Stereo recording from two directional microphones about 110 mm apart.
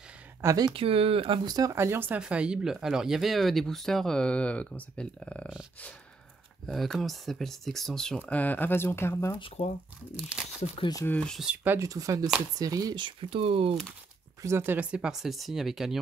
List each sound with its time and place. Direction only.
0.4 s speech: 30° right (ahead or behind)
0.7 s speech: 60° right (ahead or behind); by 5.5 s 10° left (ahead or behind)
6.6 s speech: centre (ahead or behind)
8.2 s speech: 15° left (ahead or behind)
10.4 s speech: 10° right (ahead or behind)
11.1 s speech: 10° left (ahead or behind)
11.3 s speech: 10° right (ahead or behind)
11.8 s speech: 30° right (ahead or behind); by 13.7 s 60° right (ahead or behind)
14.4 s speech: 20° right (ahead or behind); by 16.0 s 5° right (ahead or behind)